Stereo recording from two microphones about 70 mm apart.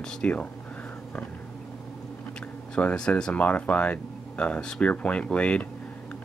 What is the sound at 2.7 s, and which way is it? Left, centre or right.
Speech, centre.